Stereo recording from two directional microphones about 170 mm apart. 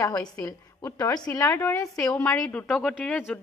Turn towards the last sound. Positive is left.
turn(degrees=10)  # may be behind; listen again after turning